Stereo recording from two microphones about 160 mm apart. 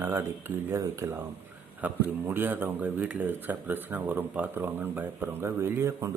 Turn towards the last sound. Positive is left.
turn(degrees=-15)  # may be behind; listen again after turning